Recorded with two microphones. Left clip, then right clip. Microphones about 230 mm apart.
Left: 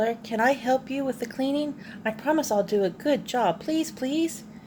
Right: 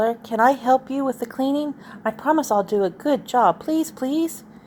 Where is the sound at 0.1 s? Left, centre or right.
Centre.